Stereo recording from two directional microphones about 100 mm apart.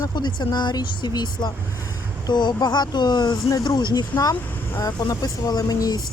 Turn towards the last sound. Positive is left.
turn(degrees=40)  # may be behind; listen again after turning